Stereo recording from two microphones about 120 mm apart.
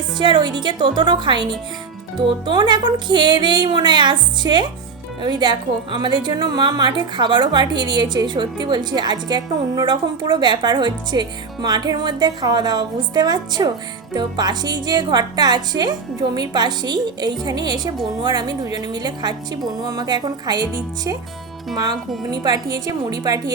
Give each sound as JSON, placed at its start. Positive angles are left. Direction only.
{"t": 0.2, "sound": "a woman's voice", "side_deg": -40}
{"t": 22.3, "sound": "a woman's voice", "side_deg": -30}